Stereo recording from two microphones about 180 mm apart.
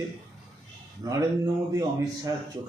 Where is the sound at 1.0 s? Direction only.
20° right (ahead or behind).